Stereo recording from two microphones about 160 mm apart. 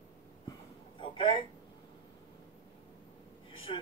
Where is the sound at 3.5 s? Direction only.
35° left (ahead or behind).